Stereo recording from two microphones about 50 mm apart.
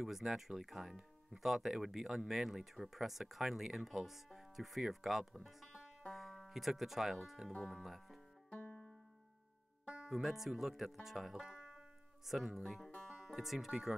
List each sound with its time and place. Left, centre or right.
0.0 s speech: centre
8.5 s banjo: left
9.8 s music: centre
10.2 s speech: centre